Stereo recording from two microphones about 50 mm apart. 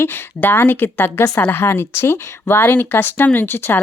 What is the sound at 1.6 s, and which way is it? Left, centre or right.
Speech, left.